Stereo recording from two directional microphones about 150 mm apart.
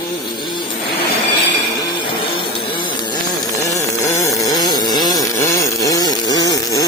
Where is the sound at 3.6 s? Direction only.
20° left (ahead or behind).